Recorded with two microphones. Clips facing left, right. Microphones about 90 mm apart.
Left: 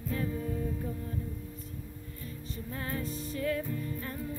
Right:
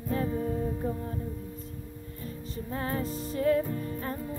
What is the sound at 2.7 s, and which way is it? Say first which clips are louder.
Music: right 5 dB; 35° right (ahead or behind).